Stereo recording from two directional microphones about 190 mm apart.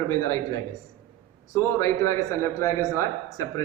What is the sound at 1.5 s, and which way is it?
A man's voice, 15° left (ahead or behind).